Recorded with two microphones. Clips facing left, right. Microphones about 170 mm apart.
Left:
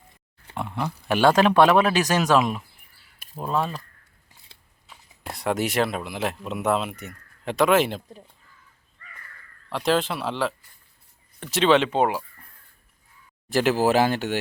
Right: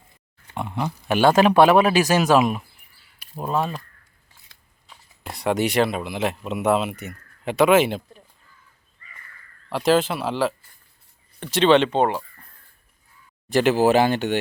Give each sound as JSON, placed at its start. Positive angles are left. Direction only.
{"t": 0.5, "sound": "speech", "side_deg": 0}
{"t": 4.5, "sound": "scissors", "side_deg": 30}
{"t": 4.9, "sound": "speech", "side_deg": 0}
{"t": 9.7, "sound": "speech", "side_deg": 0}
{"t": 11.5, "sound": "speech", "side_deg": 0}
{"t": 13.5, "sound": "speech", "side_deg": 0}